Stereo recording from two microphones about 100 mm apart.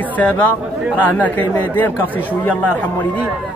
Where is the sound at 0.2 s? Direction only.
15° left (ahead or behind).